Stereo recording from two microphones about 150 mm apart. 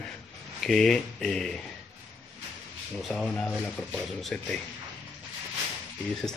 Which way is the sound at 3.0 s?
5° left (ahead or behind).